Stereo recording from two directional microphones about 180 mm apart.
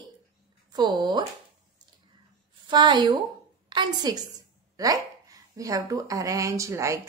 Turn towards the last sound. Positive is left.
turn(degrees=-15)  # may be behind; listen again after turning